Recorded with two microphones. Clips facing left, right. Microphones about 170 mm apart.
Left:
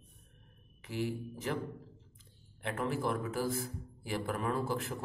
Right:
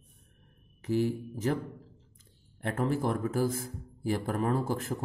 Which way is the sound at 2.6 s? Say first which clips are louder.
Right 5 dB; 45° right (ahead or behind).